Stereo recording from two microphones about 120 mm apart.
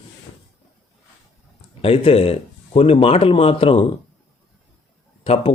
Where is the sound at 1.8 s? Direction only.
50° left (ahead or behind).